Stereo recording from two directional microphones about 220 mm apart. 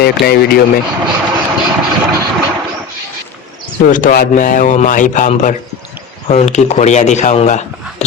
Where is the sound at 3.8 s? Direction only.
35° left (ahead or behind).